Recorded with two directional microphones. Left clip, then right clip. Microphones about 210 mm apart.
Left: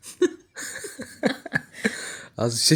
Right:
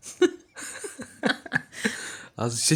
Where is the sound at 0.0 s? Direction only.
40° right (ahead or behind).